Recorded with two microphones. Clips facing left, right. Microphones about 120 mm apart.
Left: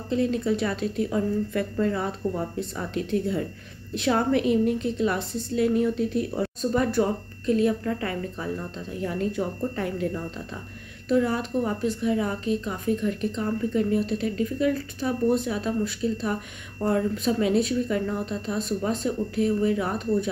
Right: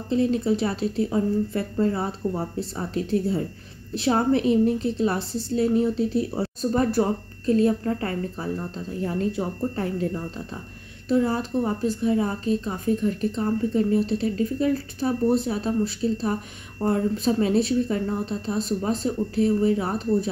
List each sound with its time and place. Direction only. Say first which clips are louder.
0.1 s a woman's voice: right 2 dB; 30° right (ahead or behind)